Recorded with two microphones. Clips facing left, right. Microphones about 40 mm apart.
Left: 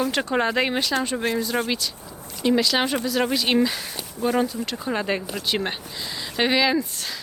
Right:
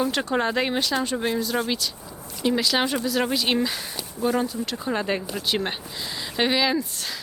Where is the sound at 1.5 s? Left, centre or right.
Centre.